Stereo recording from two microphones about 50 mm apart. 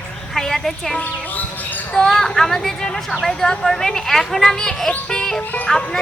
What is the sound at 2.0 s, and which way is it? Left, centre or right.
Speech, centre.